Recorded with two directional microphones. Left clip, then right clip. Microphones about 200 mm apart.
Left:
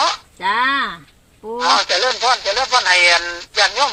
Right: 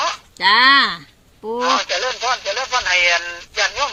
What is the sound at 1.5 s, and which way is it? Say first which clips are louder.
Speech: left 3 dB; 45° left (ahead or behind).